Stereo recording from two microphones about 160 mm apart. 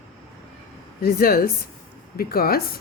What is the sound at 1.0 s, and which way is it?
Speech, 70° left (ahead or behind).